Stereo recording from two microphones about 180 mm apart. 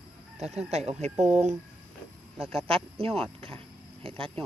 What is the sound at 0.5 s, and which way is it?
Speech, 35° right (ahead or behind).